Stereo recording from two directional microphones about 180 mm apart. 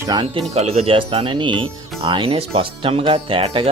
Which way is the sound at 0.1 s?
25° right (ahead or behind).